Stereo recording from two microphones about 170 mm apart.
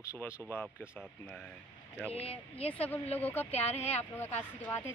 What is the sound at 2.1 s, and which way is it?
Speech, 35° left (ahead or behind).